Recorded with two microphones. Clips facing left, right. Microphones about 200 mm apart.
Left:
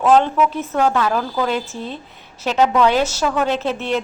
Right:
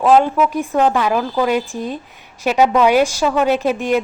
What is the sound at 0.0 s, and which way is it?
A woman's voice, 10° right (ahead or behind).